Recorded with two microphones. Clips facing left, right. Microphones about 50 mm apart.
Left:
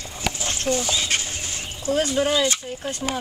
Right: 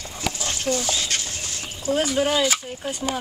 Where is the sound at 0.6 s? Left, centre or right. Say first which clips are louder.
Left 1 dB; left.